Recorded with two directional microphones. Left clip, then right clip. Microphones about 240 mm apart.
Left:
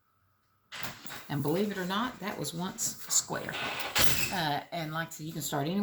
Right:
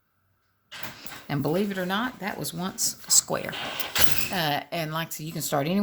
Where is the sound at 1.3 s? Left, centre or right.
Right.